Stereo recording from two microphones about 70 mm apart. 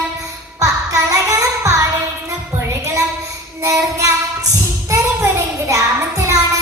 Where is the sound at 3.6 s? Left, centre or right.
Right.